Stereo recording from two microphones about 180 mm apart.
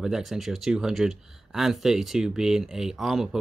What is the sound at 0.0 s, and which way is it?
Speech, centre (ahead or behind).